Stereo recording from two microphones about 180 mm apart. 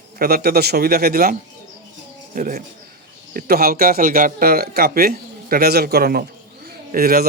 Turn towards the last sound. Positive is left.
turn(degrees=-55)  # may be behind; listen again after turning